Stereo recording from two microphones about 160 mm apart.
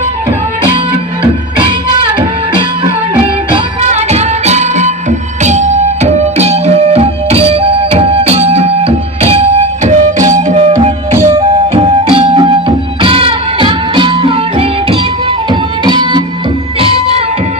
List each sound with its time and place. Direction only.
2.1 s music: 30° right (ahead or behind)
9.8 s music: 50° right (ahead or behind)